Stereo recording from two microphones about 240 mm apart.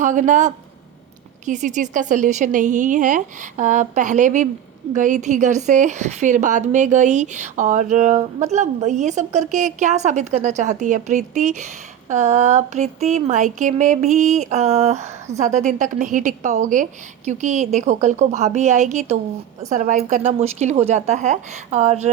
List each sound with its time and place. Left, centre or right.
0.0 s a woman's voice: right